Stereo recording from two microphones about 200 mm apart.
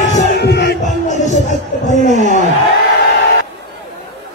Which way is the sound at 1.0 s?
35° left (ahead or behind).